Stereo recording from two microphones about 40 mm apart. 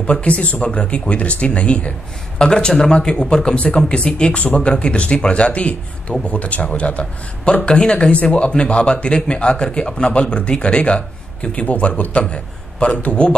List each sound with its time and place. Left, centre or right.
0.0 s a man's voice: left
12.9 s a man's voice: left